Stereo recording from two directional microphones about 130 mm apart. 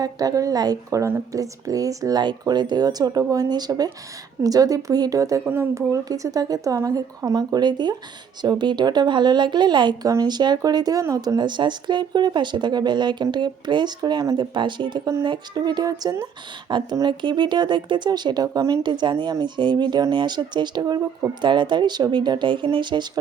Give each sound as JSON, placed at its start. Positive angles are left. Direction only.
{"t": 0.0, "sound": "speech", "side_deg": -30}